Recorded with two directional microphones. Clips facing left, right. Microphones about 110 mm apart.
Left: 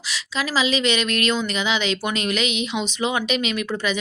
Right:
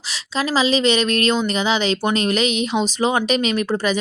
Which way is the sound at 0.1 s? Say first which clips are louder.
Right 4 dB; 35° right (ahead or behind).